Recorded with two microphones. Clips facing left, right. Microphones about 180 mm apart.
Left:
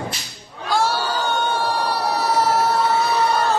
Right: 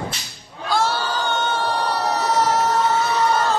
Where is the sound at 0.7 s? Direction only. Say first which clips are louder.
Left 1 dB; 10° left (ahead or behind).